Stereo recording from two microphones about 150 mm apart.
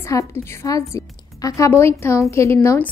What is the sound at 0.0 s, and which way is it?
A woman's voice, 20° left (ahead or behind).